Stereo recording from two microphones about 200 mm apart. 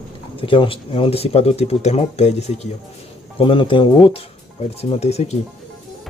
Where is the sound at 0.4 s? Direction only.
25° left (ahead or behind).